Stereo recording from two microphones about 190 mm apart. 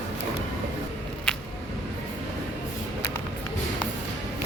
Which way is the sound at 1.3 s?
5° left (ahead or behind).